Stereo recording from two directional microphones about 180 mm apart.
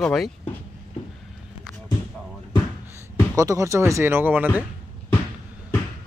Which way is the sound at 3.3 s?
20° right (ahead or behind).